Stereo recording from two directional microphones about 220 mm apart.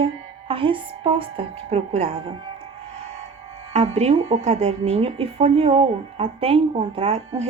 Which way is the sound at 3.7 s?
30° right (ahead or behind).